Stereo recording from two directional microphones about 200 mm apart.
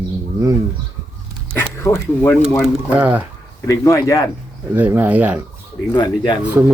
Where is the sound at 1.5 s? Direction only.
15° left (ahead or behind).